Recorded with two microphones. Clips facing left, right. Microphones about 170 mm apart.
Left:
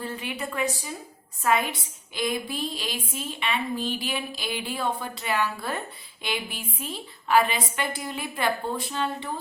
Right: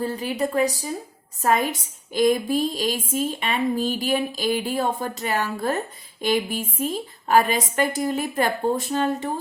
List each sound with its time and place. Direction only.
0.0 s a woman's voice: 40° right (ahead or behind)